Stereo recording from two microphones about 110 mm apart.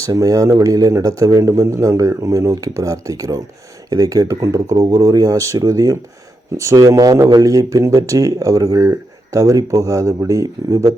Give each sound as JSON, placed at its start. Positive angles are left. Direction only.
{"t": 0.0, "sound": "a man's voice", "side_deg": -30}